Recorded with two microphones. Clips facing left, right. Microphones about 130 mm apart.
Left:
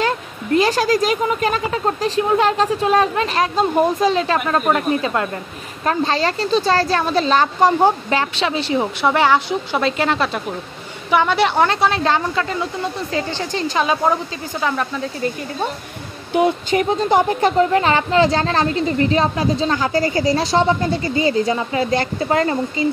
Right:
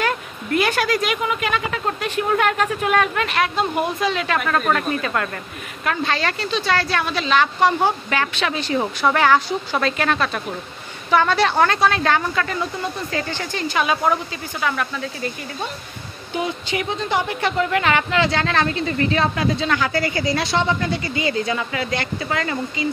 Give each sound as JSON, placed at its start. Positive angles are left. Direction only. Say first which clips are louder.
{"t": 0.0, "sound": "a woman's voice", "louder": "left 2 dB", "side_deg": 30}
{"t": 16.7, "sound": "speech", "louder": "left 5 dB", "side_deg": 40}